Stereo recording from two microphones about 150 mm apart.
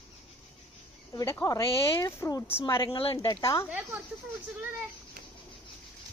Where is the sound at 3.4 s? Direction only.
20° left (ahead or behind).